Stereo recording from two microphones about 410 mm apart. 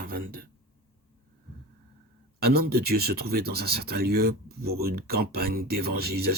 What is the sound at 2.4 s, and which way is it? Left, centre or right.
Speech, right.